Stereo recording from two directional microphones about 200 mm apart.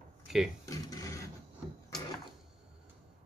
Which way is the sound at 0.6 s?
15° left (ahead or behind).